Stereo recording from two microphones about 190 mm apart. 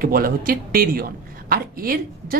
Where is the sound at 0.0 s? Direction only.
50° right (ahead or behind).